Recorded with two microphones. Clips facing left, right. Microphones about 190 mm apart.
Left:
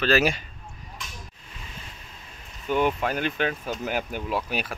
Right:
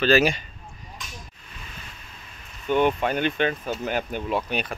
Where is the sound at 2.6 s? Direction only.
5° left (ahead or behind).